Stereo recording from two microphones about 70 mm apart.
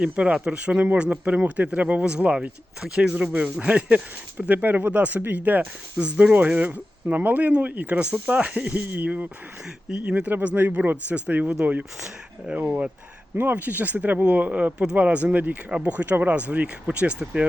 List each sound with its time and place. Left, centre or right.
0.0 s speech: centre
13.3 s speech: right